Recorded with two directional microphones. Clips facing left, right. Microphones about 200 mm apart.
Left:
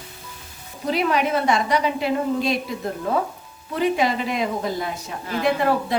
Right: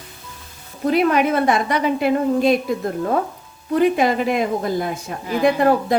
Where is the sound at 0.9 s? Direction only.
55° right (ahead or behind).